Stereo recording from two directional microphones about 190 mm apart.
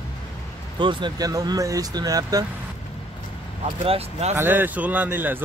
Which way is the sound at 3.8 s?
35° right (ahead or behind).